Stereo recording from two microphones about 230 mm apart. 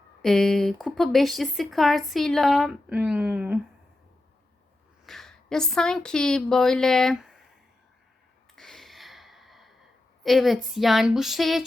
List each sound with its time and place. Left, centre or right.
0.2 s speech: centre
5.0 s speech: centre
8.5 s a sound: centre
10.2 s speech: centre